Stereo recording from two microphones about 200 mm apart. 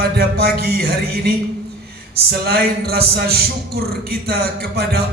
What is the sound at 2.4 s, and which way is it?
A man's voice, 50° right (ahead or behind).